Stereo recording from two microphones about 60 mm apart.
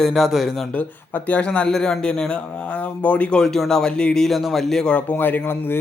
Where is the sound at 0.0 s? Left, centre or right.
Centre.